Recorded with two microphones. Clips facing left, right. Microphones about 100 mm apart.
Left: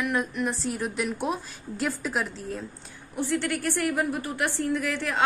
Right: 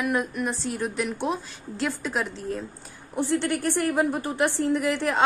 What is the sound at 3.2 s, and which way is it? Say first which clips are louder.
A woman's voice: right 2 dB; 20° right (ahead or behind).